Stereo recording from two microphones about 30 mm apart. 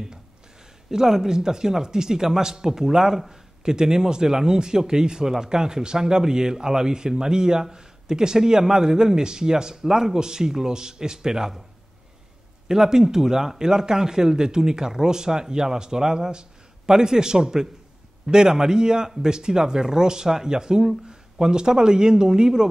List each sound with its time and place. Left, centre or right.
0.8 s speech: centre
12.6 s speech: centre